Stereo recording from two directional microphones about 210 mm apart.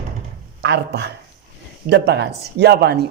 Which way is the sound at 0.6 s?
55° right (ahead or behind).